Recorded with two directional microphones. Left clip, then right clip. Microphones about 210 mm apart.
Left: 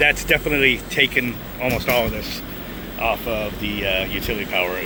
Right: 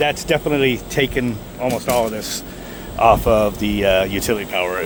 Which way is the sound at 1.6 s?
15° right (ahead or behind).